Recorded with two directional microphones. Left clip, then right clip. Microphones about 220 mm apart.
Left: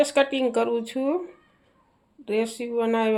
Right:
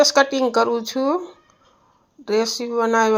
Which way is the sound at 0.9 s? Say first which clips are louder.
Right 5 dB; 10° right (ahead or behind).